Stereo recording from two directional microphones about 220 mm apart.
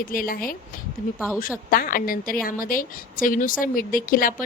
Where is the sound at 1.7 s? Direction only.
40° left (ahead or behind).